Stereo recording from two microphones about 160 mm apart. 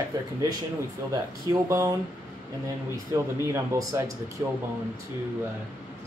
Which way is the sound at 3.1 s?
15° right (ahead or behind).